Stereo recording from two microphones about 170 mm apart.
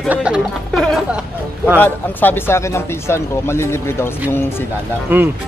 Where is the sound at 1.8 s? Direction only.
10° left (ahead or behind).